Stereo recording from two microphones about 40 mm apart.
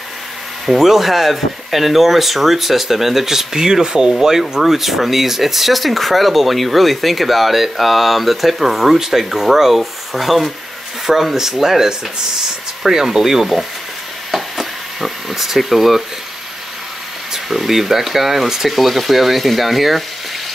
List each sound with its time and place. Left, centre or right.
0.7 s speech: centre
14.3 s a sound: centre
17.3 s speech: centre